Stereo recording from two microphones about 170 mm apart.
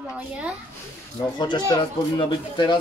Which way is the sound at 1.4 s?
25° left (ahead or behind).